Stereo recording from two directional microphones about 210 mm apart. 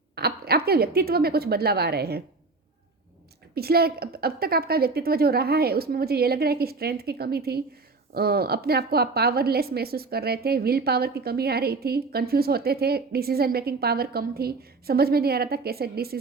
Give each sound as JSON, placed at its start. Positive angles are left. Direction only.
{"t": 0.2, "sound": "a woman's voice", "side_deg": -45}
{"t": 3.5, "sound": "a woman's voice", "side_deg": -45}